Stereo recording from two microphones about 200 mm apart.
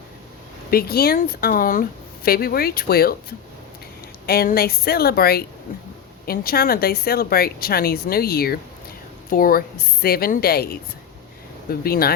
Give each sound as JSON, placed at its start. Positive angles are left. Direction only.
{"t": 0.7, "sound": "speech", "side_deg": 50}